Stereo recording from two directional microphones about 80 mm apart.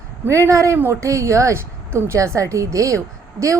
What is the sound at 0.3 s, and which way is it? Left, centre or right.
A woman's voice, right.